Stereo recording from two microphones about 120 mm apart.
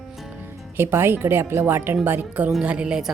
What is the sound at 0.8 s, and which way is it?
A woman's voice, 20° right (ahead or behind).